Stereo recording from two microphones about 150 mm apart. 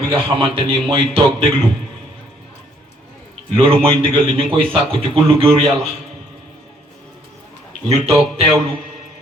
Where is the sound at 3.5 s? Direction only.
40° right (ahead or behind).